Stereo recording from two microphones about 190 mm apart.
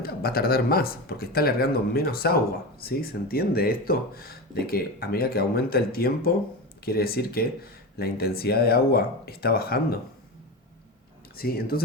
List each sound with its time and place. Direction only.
0.0 s speech: 55° left (ahead or behind)
11.3 s speech: 50° left (ahead or behind)